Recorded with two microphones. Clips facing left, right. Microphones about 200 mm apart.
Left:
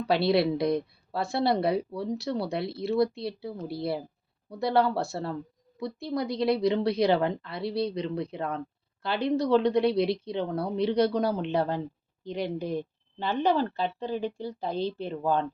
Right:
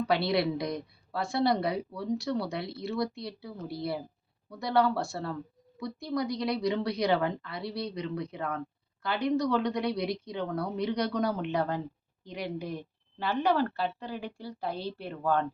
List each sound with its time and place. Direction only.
0.1 s a woman's voice: 25° left (ahead or behind)
13.1 s a woman's voice: 20° left (ahead or behind)